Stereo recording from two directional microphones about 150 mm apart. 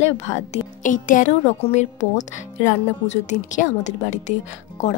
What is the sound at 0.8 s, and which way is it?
Speech, 60° left (ahead or behind).